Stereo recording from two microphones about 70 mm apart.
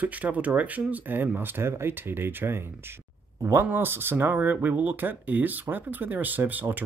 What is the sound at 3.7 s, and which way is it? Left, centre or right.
Speech, right.